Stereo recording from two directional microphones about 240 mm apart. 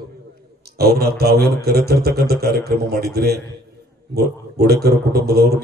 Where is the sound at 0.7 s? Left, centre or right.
Right.